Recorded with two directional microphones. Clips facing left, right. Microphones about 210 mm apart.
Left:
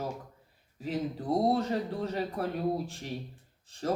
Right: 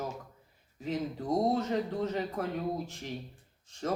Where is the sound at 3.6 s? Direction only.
35° left (ahead or behind).